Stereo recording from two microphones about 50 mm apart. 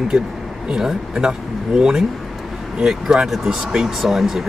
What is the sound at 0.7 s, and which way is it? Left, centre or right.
Speech, centre.